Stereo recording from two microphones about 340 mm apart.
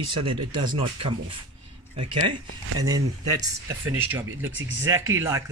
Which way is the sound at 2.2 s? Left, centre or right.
Right.